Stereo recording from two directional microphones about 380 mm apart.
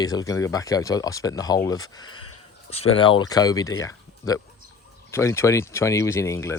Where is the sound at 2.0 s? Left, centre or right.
Left.